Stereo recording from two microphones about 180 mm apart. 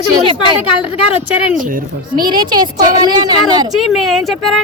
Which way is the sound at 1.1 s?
5° right (ahead or behind).